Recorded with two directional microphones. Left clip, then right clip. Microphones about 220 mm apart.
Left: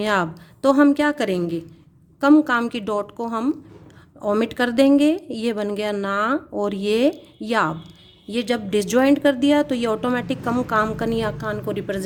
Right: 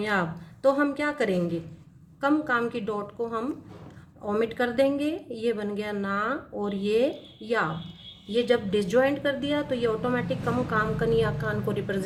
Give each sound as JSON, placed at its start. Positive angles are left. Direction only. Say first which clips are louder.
{"t": 0.0, "sound": "a woman's voice", "louder": "left 6 dB", "side_deg": 45}